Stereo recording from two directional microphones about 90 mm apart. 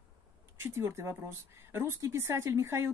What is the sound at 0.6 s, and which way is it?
Speech, 30° right (ahead or behind).